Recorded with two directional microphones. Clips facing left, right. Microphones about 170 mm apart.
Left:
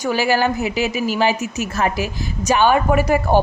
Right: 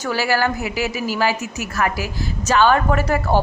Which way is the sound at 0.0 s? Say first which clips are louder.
Left 2 dB; 20° left (ahead or behind).